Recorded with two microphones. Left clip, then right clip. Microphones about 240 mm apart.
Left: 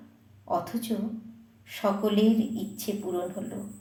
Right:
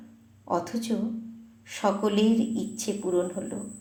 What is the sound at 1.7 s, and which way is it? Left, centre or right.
A woman's voice, right.